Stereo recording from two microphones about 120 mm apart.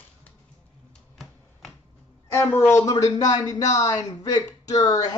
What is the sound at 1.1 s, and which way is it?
Finger snapping, centre (ahead or behind).